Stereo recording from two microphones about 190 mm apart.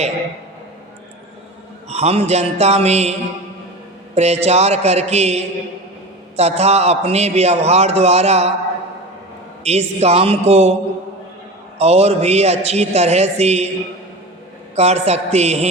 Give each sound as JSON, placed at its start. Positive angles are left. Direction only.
{"t": 1.9, "sound": "a man's voice", "side_deg": -35}
{"t": 9.6, "sound": "a man's voice", "side_deg": -35}
{"t": 11.8, "sound": "a man's voice", "side_deg": -35}
{"t": 14.8, "sound": "a man's voice", "side_deg": -35}